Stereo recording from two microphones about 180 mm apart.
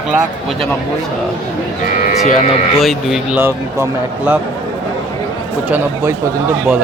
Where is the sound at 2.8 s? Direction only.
Centre (ahead or behind).